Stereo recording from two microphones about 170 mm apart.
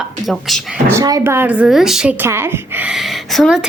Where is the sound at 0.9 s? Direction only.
20° right (ahead or behind).